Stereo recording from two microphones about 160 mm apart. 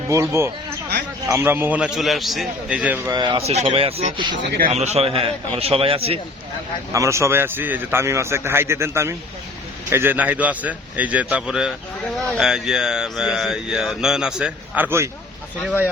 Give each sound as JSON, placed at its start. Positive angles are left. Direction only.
{"t": 0.1, "sound": "a man's voice", "side_deg": -15}
{"t": 3.1, "sound": "speech", "side_deg": -25}
{"t": 3.4, "sound": "a man's voice", "side_deg": -40}
{"t": 6.9, "sound": "a man's voice", "side_deg": -20}